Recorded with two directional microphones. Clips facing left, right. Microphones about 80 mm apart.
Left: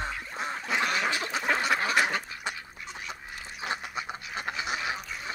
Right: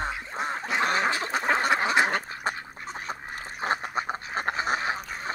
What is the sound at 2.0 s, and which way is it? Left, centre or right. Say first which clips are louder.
Goose: right 4 dB; right.